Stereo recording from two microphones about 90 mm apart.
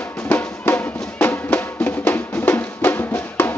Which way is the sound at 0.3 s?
20° left (ahead or behind).